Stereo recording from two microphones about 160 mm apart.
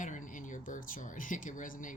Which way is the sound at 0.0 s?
55° left (ahead or behind).